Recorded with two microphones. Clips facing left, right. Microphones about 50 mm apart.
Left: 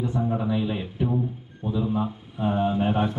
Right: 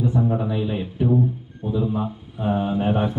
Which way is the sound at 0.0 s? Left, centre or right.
Centre.